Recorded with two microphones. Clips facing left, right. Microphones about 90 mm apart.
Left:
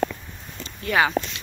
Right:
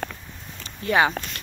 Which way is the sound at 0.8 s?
25° right (ahead or behind).